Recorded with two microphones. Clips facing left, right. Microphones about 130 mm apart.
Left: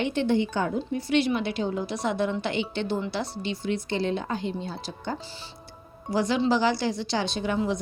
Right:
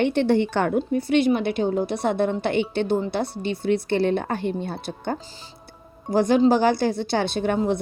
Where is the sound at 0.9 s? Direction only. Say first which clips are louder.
Right 3 dB; 55° right (ahead or behind).